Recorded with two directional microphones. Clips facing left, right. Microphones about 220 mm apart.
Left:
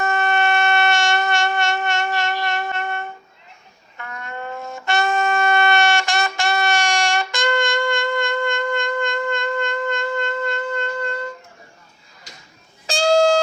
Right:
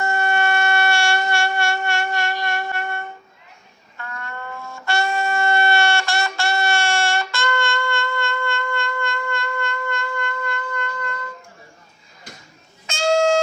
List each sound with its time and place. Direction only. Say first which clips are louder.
0.0 s shofar: left 1 dB; 20° left (ahead or behind)
12.9 s music: left 2 dB; 35° left (ahead or behind)